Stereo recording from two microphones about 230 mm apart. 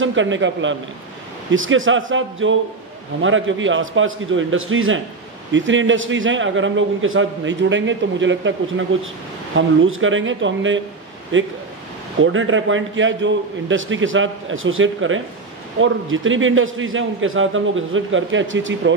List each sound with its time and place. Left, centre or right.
0.0 s a man's voice: right